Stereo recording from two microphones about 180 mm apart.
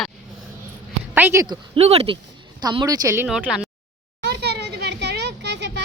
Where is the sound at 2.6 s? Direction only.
25° right (ahead or behind).